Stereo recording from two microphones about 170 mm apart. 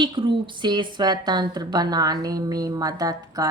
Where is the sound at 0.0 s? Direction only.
30° right (ahead or behind).